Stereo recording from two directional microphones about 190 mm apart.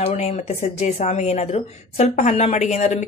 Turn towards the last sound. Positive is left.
turn(degrees=35)  # may be behind; listen again after turning